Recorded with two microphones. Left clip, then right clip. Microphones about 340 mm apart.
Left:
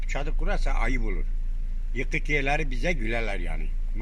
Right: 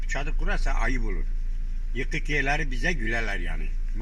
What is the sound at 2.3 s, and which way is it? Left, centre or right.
A man's voice, centre.